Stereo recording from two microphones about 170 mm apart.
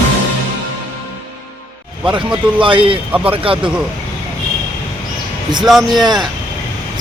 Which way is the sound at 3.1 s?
10° right (ahead or behind).